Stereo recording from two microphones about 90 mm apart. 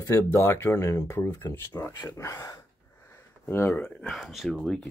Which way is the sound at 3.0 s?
25° left (ahead or behind).